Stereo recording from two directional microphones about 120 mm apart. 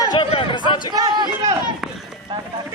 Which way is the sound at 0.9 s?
35° right (ahead or behind).